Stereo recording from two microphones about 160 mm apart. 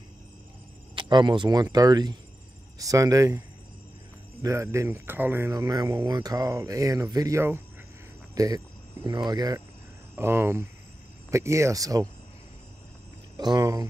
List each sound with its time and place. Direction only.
0.9 s speech: 30° right (ahead or behind)
13.4 s speech: 25° right (ahead or behind)